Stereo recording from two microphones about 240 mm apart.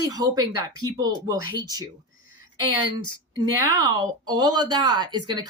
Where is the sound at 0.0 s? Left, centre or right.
Centre.